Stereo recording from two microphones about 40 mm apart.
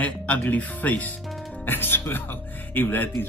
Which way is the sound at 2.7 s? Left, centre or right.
Left.